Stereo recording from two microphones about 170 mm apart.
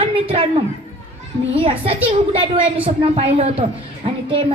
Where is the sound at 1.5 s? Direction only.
35° right (ahead or behind).